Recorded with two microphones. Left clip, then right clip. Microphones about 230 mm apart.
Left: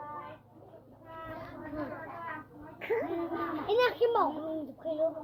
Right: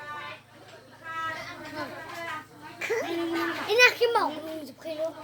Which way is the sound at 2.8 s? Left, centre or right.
Right.